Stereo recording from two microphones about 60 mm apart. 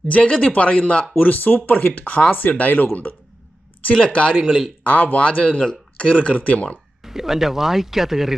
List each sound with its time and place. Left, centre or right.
0.1 s speech: centre
3.9 s speech: centre
4.4 s speech: centre
4.8 s speech: left
7.0 s speech: centre